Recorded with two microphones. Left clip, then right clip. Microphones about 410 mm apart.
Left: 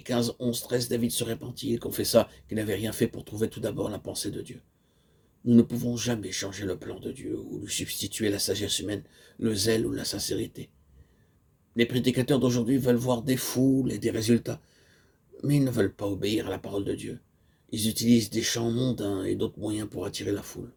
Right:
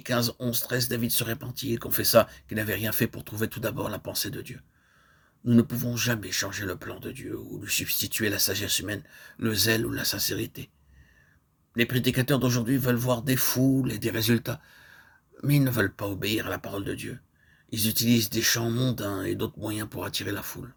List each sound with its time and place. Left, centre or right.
0.0 s speech: right
11.7 s speech: right